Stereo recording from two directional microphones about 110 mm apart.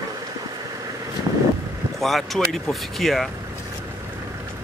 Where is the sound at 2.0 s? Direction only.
Centre (ahead or behind).